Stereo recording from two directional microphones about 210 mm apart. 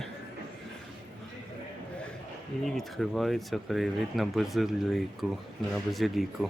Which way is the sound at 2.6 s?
Centre (ahead or behind).